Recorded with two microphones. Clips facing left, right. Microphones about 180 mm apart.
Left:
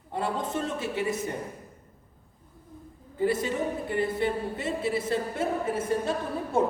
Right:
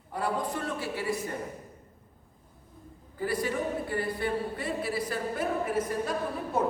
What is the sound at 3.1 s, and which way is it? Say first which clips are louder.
Speech: left 3 dB; 25° left (ahead or behind).